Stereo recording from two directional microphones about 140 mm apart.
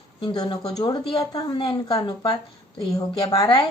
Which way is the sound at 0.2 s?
35° left (ahead or behind).